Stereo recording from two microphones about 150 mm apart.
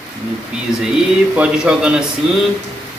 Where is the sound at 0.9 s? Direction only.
5° right (ahead or behind).